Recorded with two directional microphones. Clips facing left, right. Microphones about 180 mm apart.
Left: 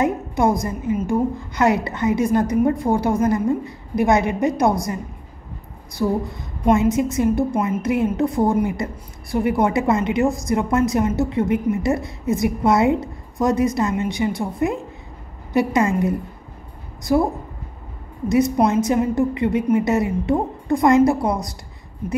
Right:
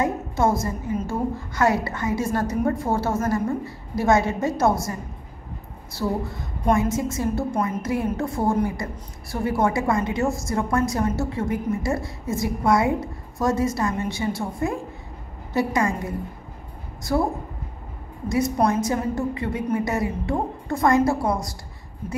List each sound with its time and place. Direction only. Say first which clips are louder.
0.0 s a woman's voice: left 3 dB; 15° left (ahead or behind)
5.9 s a woman's voice: left 4 dB; 20° left (ahead or behind)
17.1 s a woman's voice: left 5 dB; 15° left (ahead or behind)
18.9 s a woman's voice: left 6 dB; 20° left (ahead or behind)